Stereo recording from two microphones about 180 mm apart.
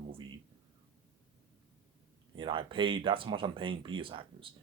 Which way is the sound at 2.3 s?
30° right (ahead or behind).